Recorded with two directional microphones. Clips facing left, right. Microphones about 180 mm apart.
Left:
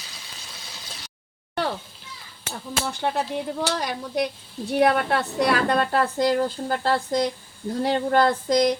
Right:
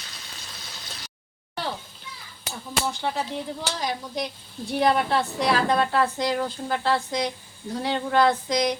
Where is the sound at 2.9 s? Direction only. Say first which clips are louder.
Left 6 dB; 60° left (ahead or behind).